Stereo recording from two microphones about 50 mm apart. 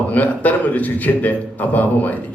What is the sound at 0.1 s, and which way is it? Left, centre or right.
A man's voice, left.